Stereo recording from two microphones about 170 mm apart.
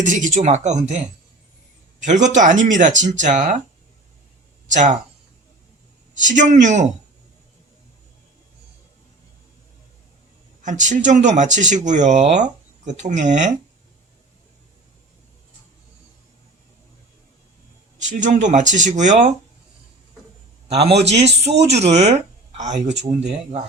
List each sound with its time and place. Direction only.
0.0 s speech: 50° right (ahead or behind)
2.0 s speech: 45° right (ahead or behind)
6.1 s speech: 50° right (ahead or behind)
10.6 s speech: 45° right (ahead or behind)
18.1 s speech: 45° right (ahead or behind)
20.7 s speech: 35° right (ahead or behind)